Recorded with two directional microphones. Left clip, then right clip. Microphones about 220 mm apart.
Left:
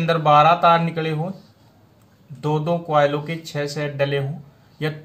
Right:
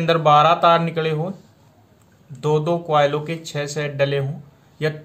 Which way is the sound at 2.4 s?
20° right (ahead or behind).